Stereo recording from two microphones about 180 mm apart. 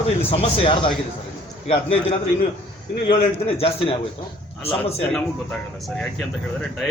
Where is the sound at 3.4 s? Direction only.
30° left (ahead or behind).